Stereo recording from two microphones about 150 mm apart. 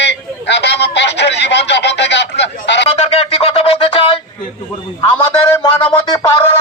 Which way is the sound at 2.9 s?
40° left (ahead or behind).